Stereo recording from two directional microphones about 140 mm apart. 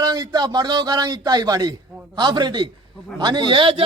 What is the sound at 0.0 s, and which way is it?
A man's voice, 30° right (ahead or behind).